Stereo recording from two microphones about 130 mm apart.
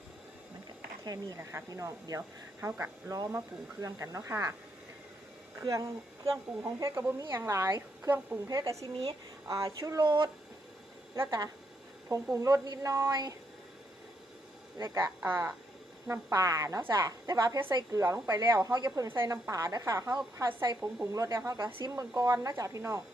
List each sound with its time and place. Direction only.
1.0 s a woman's voice: 25° right (ahead or behind)
5.5 s a woman's voice: 25° right (ahead or behind)
10.0 s speech: 35° right (ahead or behind)
11.1 s a woman's voice: 25° right (ahead or behind)
14.8 s a woman's voice: 25° right (ahead or behind)